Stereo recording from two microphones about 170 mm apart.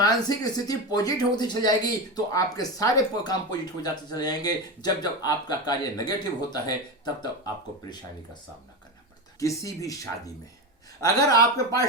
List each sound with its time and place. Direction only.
0.0 s speech: 20° left (ahead or behind)
9.4 s speech: 20° left (ahead or behind)